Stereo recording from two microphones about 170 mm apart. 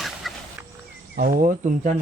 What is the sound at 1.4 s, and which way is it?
Speech, 50° right (ahead or behind).